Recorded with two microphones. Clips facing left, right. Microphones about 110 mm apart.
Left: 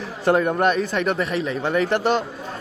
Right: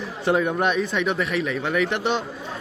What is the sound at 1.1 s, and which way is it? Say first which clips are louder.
Speech: left 1 dB; 35° left (ahead or behind).